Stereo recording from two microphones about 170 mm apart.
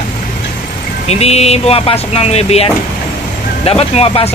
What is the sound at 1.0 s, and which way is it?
Speech, 40° left (ahead or behind).